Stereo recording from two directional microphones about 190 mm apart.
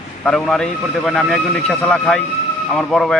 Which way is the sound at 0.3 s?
5° left (ahead or behind).